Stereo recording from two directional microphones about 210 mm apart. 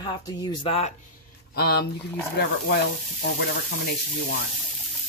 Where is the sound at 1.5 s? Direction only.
50° left (ahead or behind).